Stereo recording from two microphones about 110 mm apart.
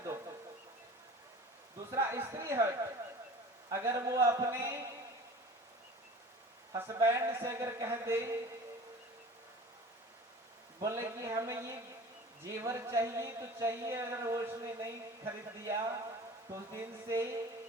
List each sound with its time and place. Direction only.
1.9 s a sound: 25° right (ahead or behind)
3.7 s speech: 25° right (ahead or behind)
6.7 s speech: 25° right (ahead or behind)
10.8 s speech: 30° right (ahead or behind)